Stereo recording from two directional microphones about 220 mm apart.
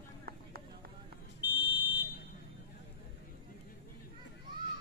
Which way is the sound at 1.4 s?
10° right (ahead or behind).